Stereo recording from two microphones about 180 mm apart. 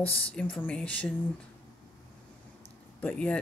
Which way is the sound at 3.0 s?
10° left (ahead or behind).